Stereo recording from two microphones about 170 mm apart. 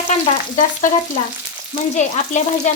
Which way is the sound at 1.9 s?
45° left (ahead or behind).